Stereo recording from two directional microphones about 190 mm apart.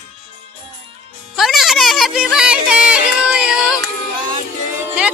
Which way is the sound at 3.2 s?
5° right (ahead or behind).